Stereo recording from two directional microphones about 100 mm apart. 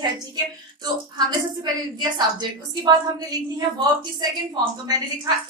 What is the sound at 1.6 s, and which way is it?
A woman's voice, 45° right (ahead or behind).